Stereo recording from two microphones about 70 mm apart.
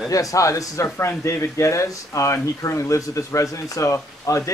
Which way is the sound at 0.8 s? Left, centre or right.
Left.